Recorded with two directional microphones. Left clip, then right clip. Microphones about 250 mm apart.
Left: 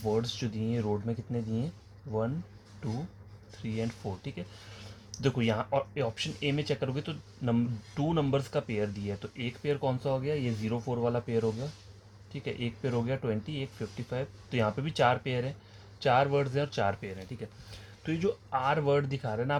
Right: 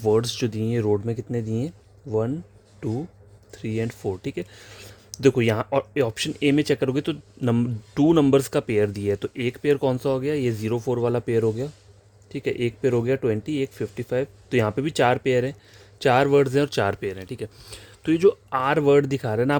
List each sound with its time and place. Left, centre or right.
0.0 s speech: right